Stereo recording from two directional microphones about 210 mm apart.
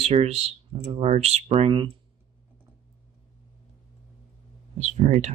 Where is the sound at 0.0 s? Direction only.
30° right (ahead or behind).